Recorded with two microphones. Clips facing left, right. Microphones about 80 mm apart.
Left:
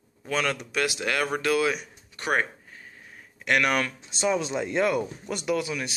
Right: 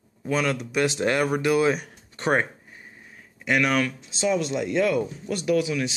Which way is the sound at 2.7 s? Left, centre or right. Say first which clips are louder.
Even; centre.